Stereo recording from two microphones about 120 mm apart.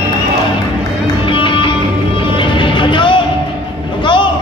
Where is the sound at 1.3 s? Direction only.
45° left (ahead or behind).